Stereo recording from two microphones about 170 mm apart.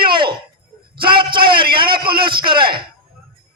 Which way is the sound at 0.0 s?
30° right (ahead or behind).